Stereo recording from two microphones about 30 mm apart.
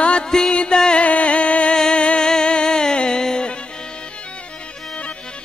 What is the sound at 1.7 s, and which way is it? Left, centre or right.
Music, left.